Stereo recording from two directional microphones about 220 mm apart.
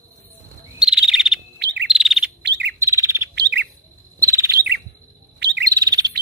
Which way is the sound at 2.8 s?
15° right (ahead or behind).